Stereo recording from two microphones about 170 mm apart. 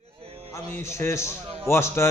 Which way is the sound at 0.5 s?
15° left (ahead or behind).